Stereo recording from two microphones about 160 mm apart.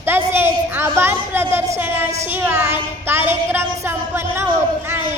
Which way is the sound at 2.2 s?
15° right (ahead or behind).